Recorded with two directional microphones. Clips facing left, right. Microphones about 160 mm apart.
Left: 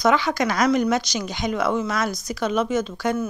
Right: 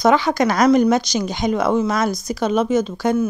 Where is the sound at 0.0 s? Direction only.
40° right (ahead or behind).